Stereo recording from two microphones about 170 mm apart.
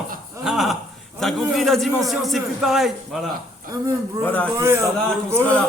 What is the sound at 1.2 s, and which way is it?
A man's voice, centre (ahead or behind).